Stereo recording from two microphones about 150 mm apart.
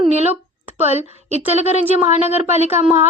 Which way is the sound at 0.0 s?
45° right (ahead or behind).